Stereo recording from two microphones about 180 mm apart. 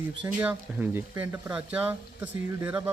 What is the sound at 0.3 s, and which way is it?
A man's voice, 10° right (ahead or behind).